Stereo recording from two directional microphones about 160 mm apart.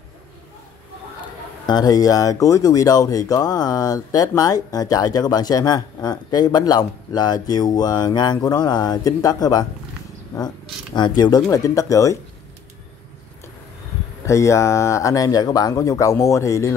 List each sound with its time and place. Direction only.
1.7 s speech: 25° left (ahead or behind)
14.2 s speech: 20° left (ahead or behind)